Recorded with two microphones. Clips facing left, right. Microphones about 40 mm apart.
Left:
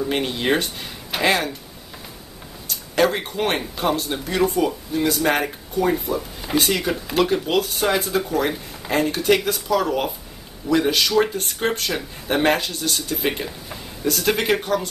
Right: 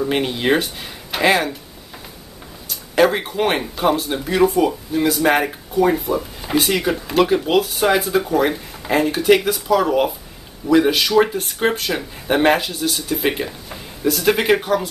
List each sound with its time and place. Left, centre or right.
0.0 s speech: centre
2.7 s speech: centre